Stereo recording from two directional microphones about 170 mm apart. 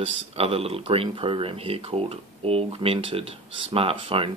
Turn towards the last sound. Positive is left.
turn(degrees=-30)  # may be behind; listen again after turning